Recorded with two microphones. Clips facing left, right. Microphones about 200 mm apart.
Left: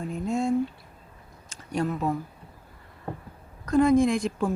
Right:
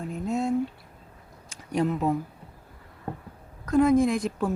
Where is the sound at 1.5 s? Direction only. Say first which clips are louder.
Right 2 dB; 15° right (ahead or behind).